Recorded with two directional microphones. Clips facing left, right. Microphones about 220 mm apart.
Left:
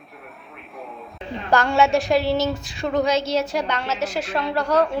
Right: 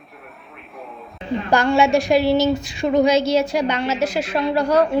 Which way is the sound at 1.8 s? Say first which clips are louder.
Right 2 dB; centre (ahead or behind).